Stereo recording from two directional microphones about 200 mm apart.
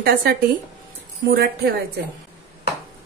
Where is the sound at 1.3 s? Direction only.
50° right (ahead or behind).